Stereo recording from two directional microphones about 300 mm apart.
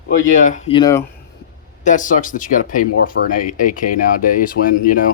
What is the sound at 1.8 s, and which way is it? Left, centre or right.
Speech, left.